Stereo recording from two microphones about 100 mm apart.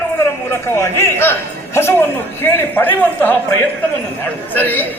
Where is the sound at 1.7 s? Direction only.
25° left (ahead or behind).